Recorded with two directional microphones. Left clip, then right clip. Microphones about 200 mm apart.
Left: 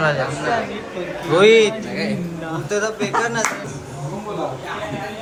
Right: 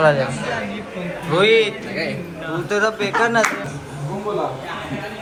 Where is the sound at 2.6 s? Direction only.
Centre (ahead or behind).